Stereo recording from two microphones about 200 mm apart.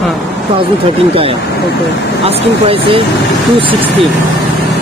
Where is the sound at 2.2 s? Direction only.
30° right (ahead or behind).